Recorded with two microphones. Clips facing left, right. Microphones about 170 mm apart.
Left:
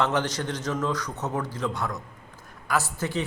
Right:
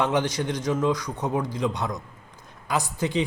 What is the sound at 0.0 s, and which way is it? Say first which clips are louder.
A man's voice: right 2 dB; 10° right (ahead or behind).